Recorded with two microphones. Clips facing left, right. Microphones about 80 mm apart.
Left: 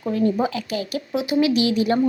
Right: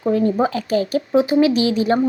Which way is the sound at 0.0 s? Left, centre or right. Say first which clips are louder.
Right 3 dB; right.